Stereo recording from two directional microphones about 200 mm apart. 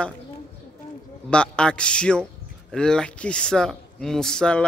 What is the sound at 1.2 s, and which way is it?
Speech, 5° left (ahead or behind).